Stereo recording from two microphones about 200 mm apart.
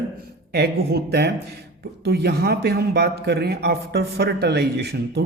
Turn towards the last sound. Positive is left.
turn(degrees=-55)  # may be behind; listen again after turning